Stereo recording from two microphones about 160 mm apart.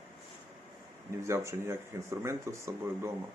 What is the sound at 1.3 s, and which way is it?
Speech, 15° right (ahead or behind).